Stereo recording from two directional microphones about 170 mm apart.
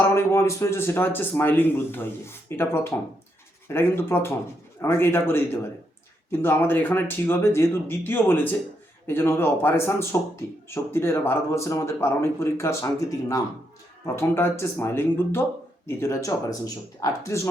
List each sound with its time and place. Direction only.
0.0 s speech: 15° left (ahead or behind)